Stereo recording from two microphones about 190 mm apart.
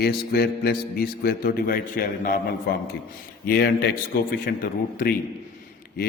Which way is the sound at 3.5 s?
55° left (ahead or behind).